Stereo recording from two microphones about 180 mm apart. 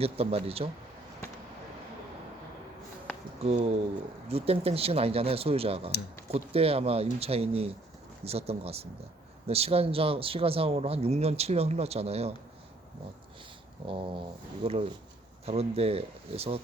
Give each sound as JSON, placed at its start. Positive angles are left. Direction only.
{"t": 0.0, "sound": "speech", "side_deg": -35}
{"t": 3.4, "sound": "speech", "side_deg": -30}
{"t": 13.8, "sound": "a sound", "side_deg": -30}
{"t": 15.4, "sound": "speech", "side_deg": -35}